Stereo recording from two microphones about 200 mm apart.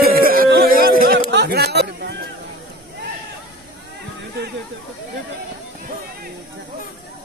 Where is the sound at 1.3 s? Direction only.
55° right (ahead or behind).